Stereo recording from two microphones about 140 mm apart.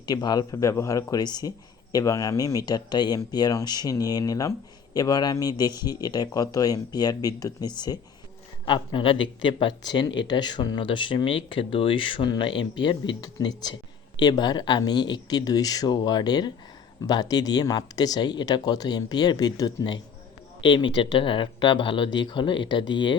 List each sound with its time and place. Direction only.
0.0 s speech: 30° left (ahead or behind)